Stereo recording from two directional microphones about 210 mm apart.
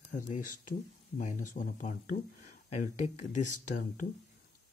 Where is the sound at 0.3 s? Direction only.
40° left (ahead or behind).